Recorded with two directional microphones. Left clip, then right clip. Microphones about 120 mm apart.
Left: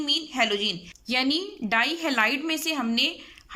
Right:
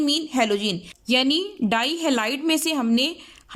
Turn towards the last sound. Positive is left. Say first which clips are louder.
# right 2 dB
turn(degrees=-35)  # may be behind; listen again after turning